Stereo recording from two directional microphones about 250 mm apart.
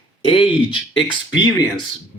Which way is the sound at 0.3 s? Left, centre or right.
Left.